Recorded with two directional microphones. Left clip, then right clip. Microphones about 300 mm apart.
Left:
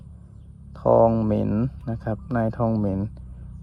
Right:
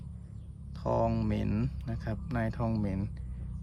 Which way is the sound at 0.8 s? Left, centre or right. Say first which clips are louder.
Left 13 dB; centre.